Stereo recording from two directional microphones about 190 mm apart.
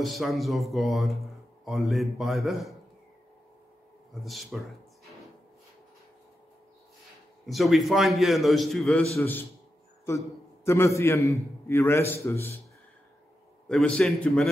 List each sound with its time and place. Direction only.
0.0 s speech: centre (ahead or behind)
4.1 s speech: centre (ahead or behind)
7.4 s speech: centre (ahead or behind)
9.2 s a man's voice: 10° left (ahead or behind)
13.7 s speech: 5° left (ahead or behind)